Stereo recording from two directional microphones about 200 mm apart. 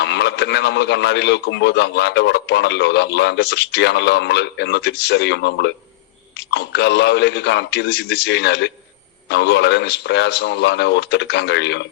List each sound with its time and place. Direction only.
0.0 s a man's voice: 60° left (ahead or behind)